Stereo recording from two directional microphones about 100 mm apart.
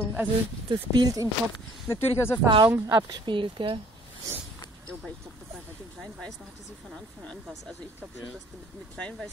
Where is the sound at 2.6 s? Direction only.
25° right (ahead or behind).